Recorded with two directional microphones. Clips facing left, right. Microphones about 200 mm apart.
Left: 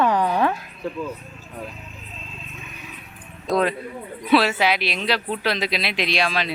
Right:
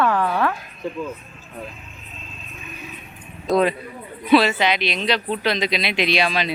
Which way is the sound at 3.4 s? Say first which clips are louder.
Right 3 dB; centre (ahead or behind).